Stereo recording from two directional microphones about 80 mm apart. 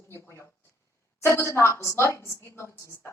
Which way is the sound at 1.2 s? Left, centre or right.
Left.